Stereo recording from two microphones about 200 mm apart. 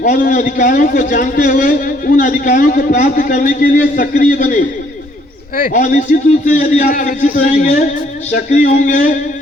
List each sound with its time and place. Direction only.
0.0 s a man's voice: 40° left (ahead or behind)